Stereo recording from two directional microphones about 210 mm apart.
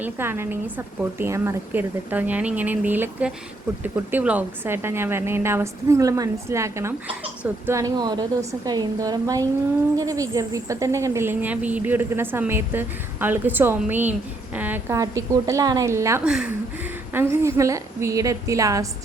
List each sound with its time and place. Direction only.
0.0 s speech: 10° right (ahead or behind)